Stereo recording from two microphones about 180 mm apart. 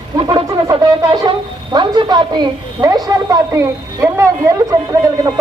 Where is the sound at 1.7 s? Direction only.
25° right (ahead or behind).